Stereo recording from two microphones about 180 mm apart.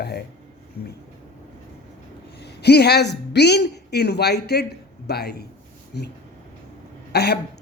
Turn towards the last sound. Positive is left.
turn(degrees=65)  # may be behind; listen again after turning